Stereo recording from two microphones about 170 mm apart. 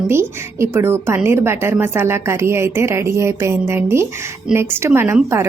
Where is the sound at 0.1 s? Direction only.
15° right (ahead or behind).